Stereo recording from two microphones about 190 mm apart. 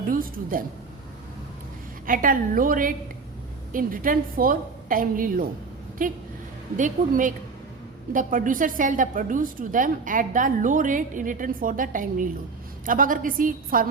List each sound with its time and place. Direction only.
0.1 s a woman's voice: 45° right (ahead or behind)
2.0 s a woman's voice: 45° right (ahead or behind)